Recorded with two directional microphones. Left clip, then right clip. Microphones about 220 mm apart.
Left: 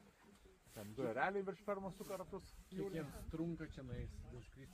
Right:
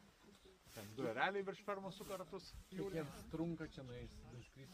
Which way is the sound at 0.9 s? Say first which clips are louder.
Even; 30° left (ahead or behind).